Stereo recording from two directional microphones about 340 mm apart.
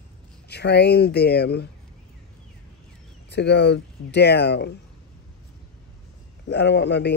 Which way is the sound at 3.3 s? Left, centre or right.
Left.